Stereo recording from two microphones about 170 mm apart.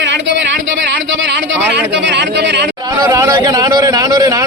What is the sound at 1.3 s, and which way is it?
Speech, 90° right.